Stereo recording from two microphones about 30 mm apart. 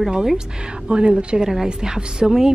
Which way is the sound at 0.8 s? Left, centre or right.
Right.